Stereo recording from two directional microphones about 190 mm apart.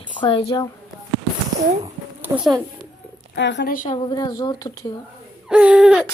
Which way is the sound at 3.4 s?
65° left (ahead or behind).